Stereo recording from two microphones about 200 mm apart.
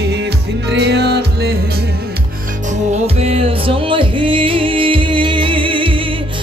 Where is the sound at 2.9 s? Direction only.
30° right (ahead or behind).